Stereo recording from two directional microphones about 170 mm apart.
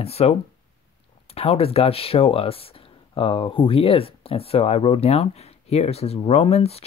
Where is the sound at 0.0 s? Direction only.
35° left (ahead or behind).